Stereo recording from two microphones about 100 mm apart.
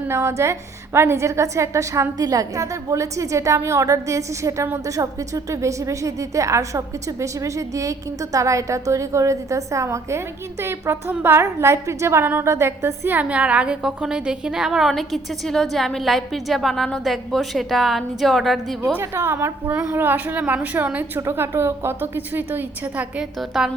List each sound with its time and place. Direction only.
0.1 s a woman's voice: 25° right (ahead or behind); by 18.8 s centre (ahead or behind)
18.9 s a woman's voice: 25° right (ahead or behind)
23.4 s a woman's voice: 5° right (ahead or behind)